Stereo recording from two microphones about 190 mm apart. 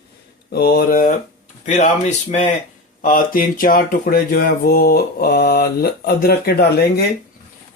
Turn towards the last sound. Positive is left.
turn(degrees=55)  # may be behind; listen again after turning